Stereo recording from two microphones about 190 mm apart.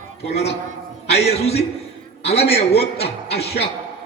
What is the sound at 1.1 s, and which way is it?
A man's voice, 35° left (ahead or behind).